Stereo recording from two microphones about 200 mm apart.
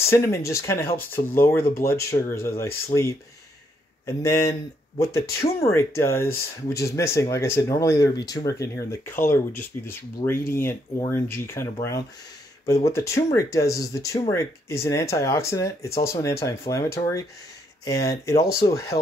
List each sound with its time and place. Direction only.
0.0 s speech: 15° left (ahead or behind)
12.8 s speech: 15° left (ahead or behind)